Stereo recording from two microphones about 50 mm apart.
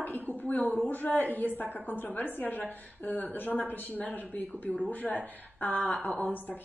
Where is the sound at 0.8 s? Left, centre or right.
Left.